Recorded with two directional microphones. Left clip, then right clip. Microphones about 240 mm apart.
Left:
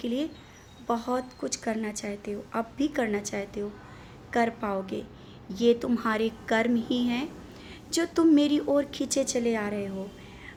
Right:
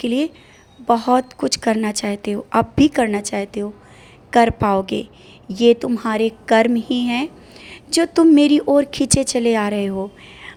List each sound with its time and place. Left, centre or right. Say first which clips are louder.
0.0 s a woman's voice: right 10 dB; right